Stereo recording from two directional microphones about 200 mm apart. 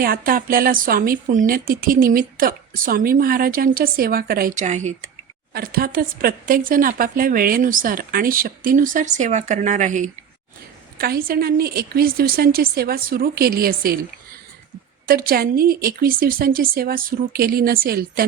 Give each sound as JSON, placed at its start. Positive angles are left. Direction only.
{"t": 0.0, "sound": "a woman's voice", "side_deg": -45}
{"t": 5.5, "sound": "a woman's voice", "side_deg": -50}
{"t": 10.9, "sound": "a woman's voice", "side_deg": -50}
{"t": 15.0, "sound": "a woman's voice", "side_deg": -45}